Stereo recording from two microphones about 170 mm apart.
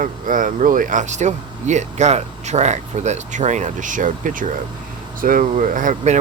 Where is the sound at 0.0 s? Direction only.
50° right (ahead or behind).